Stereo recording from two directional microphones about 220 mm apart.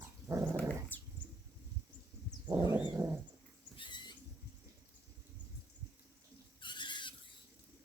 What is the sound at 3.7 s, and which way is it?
Pig, 20° left (ahead or behind).